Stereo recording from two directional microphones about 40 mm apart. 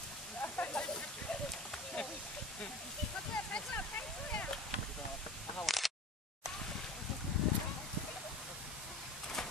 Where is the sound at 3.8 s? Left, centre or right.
Left.